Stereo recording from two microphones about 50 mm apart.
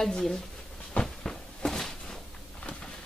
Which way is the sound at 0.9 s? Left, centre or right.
Left.